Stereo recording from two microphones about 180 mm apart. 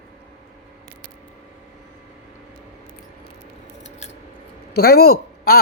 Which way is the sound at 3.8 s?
40° left (ahead or behind).